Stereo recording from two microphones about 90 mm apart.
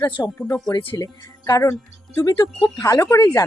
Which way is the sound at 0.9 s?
45° left (ahead or behind).